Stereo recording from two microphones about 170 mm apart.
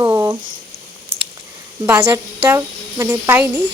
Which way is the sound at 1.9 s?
10° right (ahead or behind).